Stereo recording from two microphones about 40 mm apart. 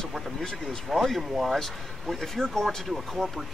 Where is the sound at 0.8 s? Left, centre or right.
Centre.